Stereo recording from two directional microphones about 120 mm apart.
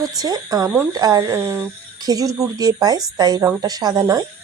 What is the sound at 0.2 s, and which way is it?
Speech, 30° right (ahead or behind).